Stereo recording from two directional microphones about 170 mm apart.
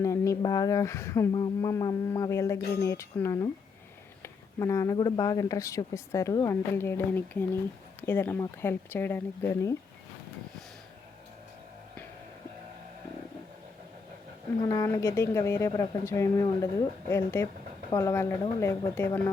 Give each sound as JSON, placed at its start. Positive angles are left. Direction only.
{"t": 0.0, "sound": "speech", "side_deg": 20}
{"t": 14.6, "sound": "speech", "side_deg": 20}